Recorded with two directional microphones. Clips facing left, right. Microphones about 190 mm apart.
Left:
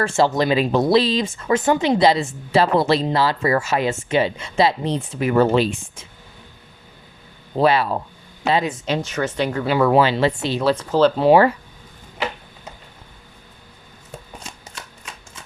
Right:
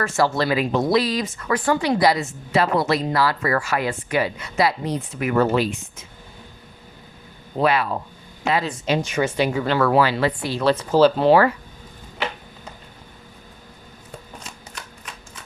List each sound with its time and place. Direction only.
0.0 s speech: 25° left (ahead or behind)
7.6 s speech: 30° left (ahead or behind)
8.9 s speech: 10° right (ahead or behind)
9.6 s speech: 15° left (ahead or behind)
10.8 s speech: 5° right (ahead or behind)